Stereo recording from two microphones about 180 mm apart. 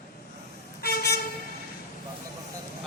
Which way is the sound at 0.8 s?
60° left (ahead or behind).